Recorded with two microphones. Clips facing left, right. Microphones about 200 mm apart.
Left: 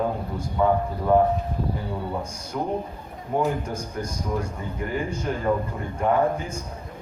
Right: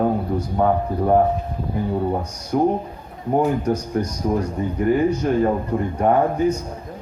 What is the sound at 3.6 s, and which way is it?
A man's voice, 40° right (ahead or behind).